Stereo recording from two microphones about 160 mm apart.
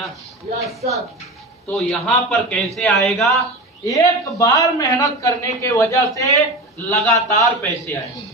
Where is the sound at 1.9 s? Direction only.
5° left (ahead or behind).